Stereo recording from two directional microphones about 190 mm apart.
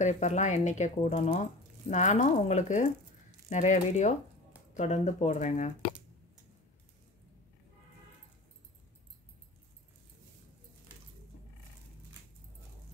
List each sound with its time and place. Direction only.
0.0 s speech: 40° left (ahead or behind)